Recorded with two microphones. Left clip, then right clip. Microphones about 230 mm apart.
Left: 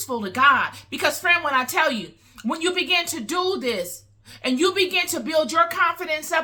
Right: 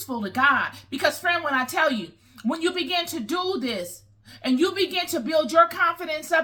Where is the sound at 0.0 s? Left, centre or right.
Centre.